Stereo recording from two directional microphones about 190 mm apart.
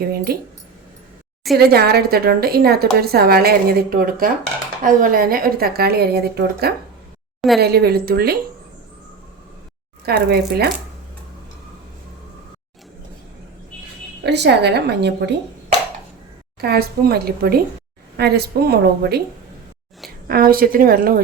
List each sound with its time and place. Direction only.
0.0 s a woman's voice: 55° right (ahead or behind)
1.5 s a woman's voice: 55° right (ahead or behind)
10.1 s a woman's voice: 55° right (ahead or behind)
14.3 s a woman's voice: 60° right (ahead or behind)
16.6 s a woman's voice: 55° right (ahead or behind)
20.2 s a woman's voice: 50° right (ahead or behind)